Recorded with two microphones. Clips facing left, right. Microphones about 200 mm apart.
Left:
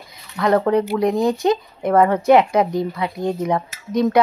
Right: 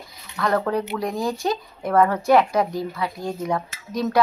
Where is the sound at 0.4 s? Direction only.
20° left (ahead or behind).